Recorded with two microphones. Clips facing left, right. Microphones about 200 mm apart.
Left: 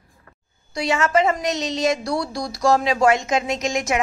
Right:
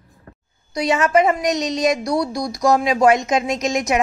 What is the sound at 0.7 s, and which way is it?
A woman's voice, 20° right (ahead or behind).